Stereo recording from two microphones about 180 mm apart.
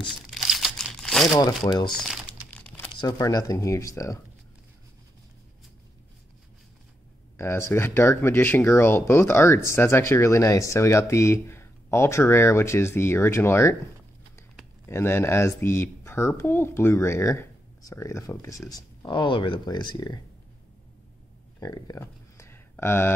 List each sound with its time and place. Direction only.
0.3 s crumpling: centre (ahead or behind)
1.4 s speech: 25° left (ahead or behind)
1.9 s speech: 5° left (ahead or behind)
3.0 s speech: 20° left (ahead or behind)
7.3 s speech: 15° left (ahead or behind)
14.9 s speech: 15° left (ahead or behind)
21.5 s a sound: 20° left (ahead or behind)